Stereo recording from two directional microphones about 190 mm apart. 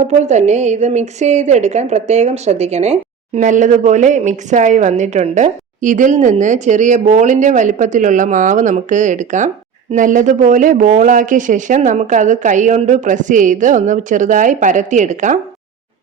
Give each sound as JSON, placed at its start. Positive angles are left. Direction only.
{"t": 0.0, "sound": "a woman's voice", "side_deg": -35}